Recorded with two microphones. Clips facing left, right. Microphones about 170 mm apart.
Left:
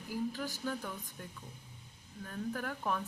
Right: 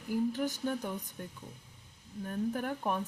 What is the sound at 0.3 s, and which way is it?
Speech, 20° right (ahead or behind).